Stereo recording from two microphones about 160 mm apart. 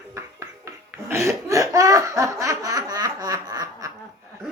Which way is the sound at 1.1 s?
15° right (ahead or behind).